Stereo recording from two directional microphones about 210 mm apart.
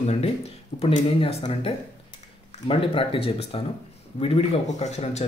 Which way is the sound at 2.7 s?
25° left (ahead or behind).